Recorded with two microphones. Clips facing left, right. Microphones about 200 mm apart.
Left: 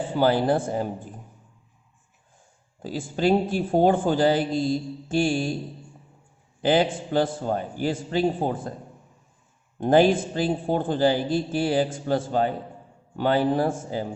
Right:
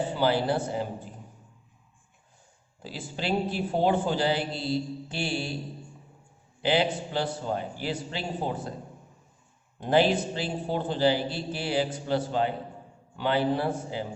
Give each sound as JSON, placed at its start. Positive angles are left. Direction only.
{"t": 0.1, "sound": "a man's voice", "side_deg": 50}
{"t": 2.8, "sound": "a man's voice", "side_deg": 45}
{"t": 6.6, "sound": "a man's voice", "side_deg": 45}
{"t": 9.8, "sound": "a man's voice", "side_deg": 50}